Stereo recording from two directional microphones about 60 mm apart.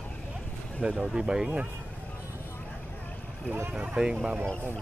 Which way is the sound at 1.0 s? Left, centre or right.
Centre.